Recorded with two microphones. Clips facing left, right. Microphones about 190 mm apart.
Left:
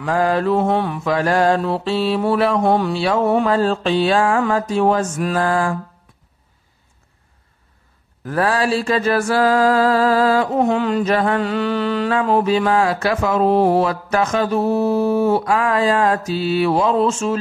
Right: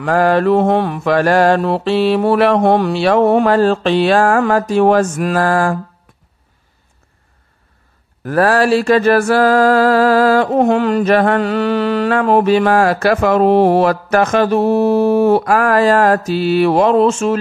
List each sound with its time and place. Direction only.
0.0 s mantra: 70° right (ahead or behind)
8.2 s mantra: 65° right (ahead or behind)